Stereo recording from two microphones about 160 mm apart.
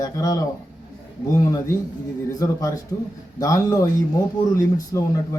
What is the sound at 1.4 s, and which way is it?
Speech, 20° left (ahead or behind).